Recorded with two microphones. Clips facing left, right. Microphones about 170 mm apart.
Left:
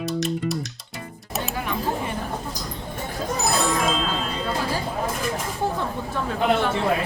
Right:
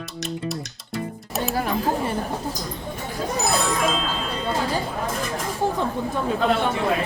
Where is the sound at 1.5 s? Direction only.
35° right (ahead or behind).